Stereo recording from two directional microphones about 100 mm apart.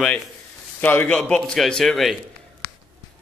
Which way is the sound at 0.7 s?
20° left (ahead or behind).